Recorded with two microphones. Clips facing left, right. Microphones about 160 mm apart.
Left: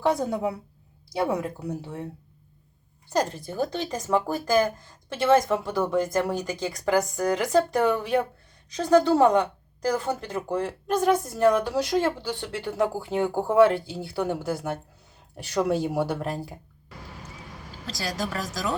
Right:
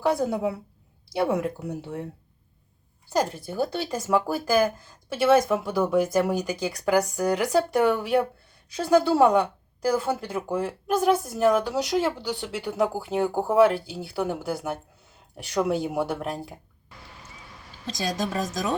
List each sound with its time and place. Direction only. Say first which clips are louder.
0.0 s speech: right 1 dB; 5° right (ahead or behind)
3.1 s speech: even; 10° right (ahead or behind)
17.9 s speech: right 3 dB; 20° right (ahead or behind)